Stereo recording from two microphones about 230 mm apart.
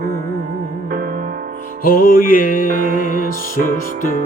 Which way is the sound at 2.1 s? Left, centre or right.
Left.